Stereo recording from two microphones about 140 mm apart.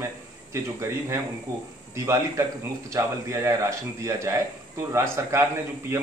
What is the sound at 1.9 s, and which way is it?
A man's voice, 20° right (ahead or behind).